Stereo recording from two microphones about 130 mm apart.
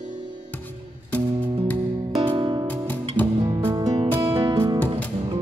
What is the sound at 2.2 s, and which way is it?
Music, 40° right (ahead or behind).